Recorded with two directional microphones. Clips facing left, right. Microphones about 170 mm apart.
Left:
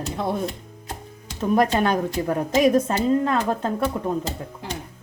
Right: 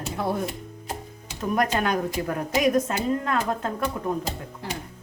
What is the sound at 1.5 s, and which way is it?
Speech, 30° left (ahead or behind).